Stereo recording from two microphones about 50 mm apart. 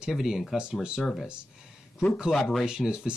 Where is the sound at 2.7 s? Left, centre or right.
Centre.